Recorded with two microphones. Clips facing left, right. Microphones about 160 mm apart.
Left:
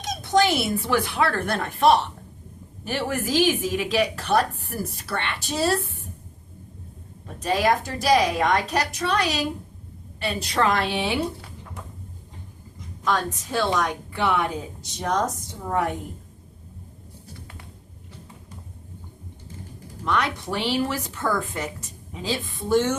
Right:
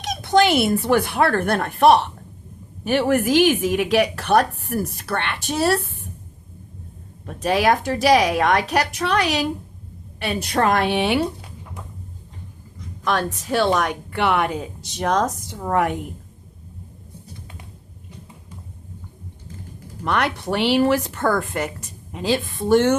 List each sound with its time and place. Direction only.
0.1 s a woman's voice: 65° right (ahead or behind)
7.3 s a woman's voice: 70° right (ahead or behind)
13.1 s a woman's voice: 70° right (ahead or behind)
20.1 s a woman's voice: 65° right (ahead or behind)